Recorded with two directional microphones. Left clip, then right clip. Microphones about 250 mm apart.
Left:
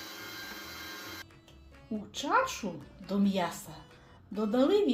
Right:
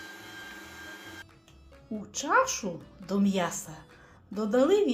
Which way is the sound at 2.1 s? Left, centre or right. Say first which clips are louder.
Right 3 dB; centre.